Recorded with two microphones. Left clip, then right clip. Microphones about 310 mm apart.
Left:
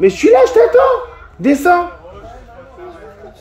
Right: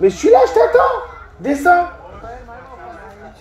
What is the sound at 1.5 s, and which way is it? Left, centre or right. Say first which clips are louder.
Speech: left 1 dB; left.